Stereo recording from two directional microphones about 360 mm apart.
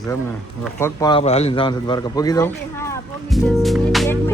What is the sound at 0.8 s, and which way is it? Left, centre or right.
A man's voice, centre.